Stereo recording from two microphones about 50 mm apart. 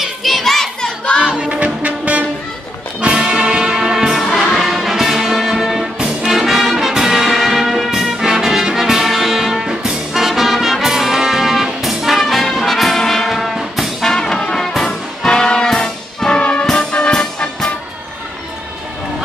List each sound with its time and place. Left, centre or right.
0.0 s children playing: centre
1.2 s music: centre
3.0 s brass instrument: centre
4.2 s music: centre
6.2 s brass instrument: centre
14.0 s brass instrument: centre
16.7 s music: centre